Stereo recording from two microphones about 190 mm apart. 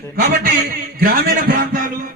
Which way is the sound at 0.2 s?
55° right (ahead or behind).